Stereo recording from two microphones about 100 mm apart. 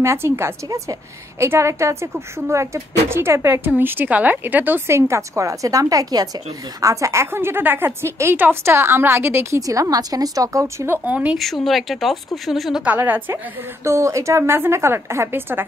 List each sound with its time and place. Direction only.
0.0 s a woman's voice: 25° right (ahead or behind)
9.6 s a woman's voice: 35° right (ahead or behind)
11.1 s speech: 15° right (ahead or behind)
11.3 s speech: centre (ahead or behind)
12.8 s a woman's voice: 15° right (ahead or behind)
13.8 s a woman's voice: 30° right (ahead or behind)